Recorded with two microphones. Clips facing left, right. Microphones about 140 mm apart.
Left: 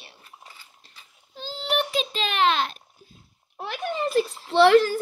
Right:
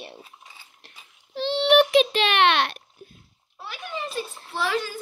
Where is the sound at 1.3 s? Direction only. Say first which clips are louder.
Right 9 dB; 75° right (ahead or behind).